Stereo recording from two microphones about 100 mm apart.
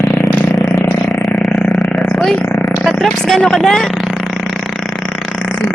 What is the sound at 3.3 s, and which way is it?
Speech, 5° left (ahead or behind).